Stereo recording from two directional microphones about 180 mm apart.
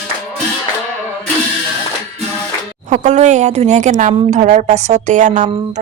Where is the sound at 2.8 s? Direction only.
40° right (ahead or behind).